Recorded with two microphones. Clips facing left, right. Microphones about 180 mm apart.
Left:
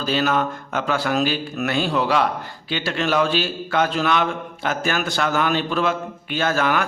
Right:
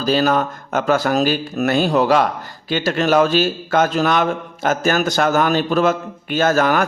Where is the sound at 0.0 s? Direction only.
40° right (ahead or behind).